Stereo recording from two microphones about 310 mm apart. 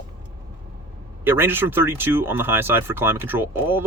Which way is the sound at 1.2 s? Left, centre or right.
Centre.